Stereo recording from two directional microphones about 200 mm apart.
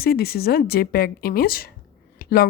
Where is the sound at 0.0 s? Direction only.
50° left (ahead or behind).